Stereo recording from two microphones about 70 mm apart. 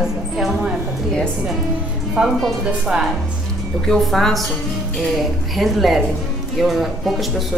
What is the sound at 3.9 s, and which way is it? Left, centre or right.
Speech, centre.